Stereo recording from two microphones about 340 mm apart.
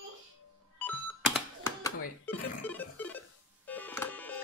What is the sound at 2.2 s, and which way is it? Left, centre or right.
Music, centre.